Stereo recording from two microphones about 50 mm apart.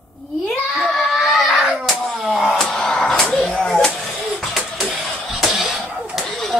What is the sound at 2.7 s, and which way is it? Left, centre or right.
Music, centre.